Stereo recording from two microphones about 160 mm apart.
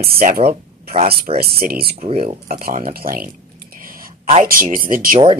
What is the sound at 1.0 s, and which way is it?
Speech, 40° right (ahead or behind).